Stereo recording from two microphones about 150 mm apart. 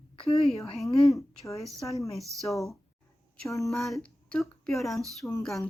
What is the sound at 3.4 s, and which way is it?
Speech, 20° left (ahead or behind).